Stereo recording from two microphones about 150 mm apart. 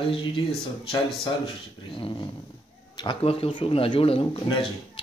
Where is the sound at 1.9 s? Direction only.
35° left (ahead or behind).